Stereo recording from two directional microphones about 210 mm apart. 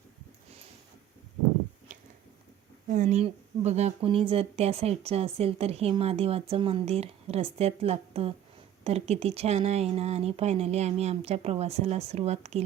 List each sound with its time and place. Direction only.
2.9 s speech: 35° right (ahead or behind)